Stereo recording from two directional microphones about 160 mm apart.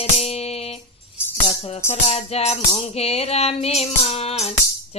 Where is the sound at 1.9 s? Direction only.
40° left (ahead or behind).